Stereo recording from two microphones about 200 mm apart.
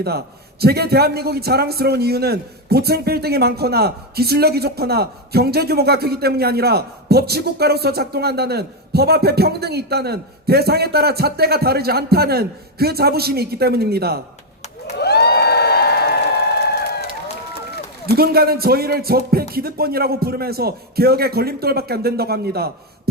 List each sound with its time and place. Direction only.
0.6 s a man's voice: 50° right (ahead or behind)
14.9 s crowd: 55° left (ahead or behind)
18.0 s a man's voice: 50° right (ahead or behind)